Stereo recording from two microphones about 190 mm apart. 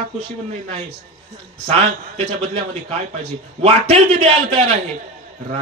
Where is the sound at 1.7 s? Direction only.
35° right (ahead or behind).